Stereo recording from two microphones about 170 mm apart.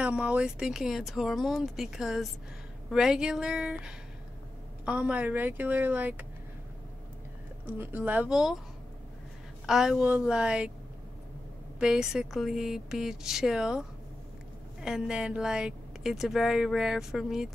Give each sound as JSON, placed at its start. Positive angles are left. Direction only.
{"t": 0.0, "sound": "a woman's voice", "side_deg": -5}
{"t": 7.6, "sound": "a woman's voice", "side_deg": -10}
{"t": 9.7, "sound": "speech", "side_deg": -5}
{"t": 11.8, "sound": "speech", "side_deg": -5}